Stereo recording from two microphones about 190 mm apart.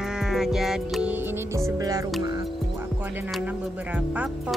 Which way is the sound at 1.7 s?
20° right (ahead or behind).